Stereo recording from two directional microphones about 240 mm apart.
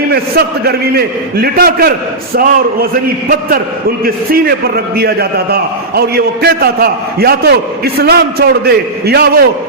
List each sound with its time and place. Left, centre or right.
0.1 s a man's voice: right
3.2 s a man's voice: right